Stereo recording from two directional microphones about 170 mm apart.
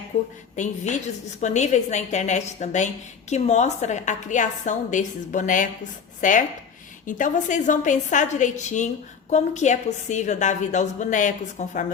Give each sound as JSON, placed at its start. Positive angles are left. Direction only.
{"t": 0.1, "sound": "a woman's voice", "side_deg": 45}